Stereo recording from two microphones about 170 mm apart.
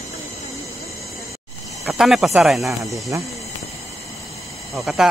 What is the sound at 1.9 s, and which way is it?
Speech, centre (ahead or behind).